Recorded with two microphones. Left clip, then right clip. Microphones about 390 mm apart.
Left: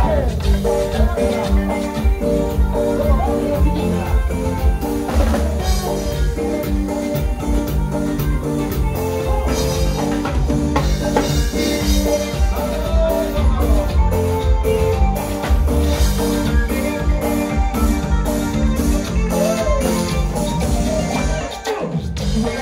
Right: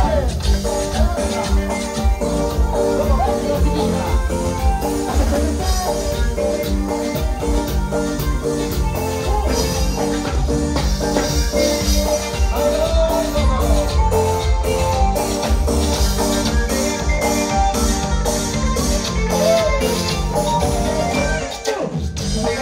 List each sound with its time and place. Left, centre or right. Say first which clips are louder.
16.3 s music: right 1 dB; right